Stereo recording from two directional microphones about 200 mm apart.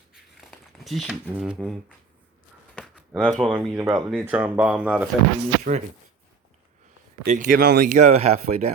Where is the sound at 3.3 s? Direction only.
Centre (ahead or behind).